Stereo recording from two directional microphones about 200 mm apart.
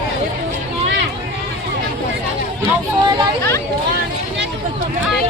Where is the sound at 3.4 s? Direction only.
15° left (ahead or behind).